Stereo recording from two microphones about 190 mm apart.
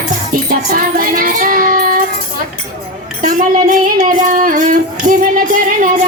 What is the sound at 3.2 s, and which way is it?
Child singing, 45° right (ahead or behind).